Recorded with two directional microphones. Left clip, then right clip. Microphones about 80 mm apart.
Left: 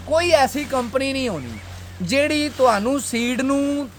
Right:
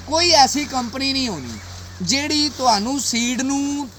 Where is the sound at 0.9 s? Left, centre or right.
Left.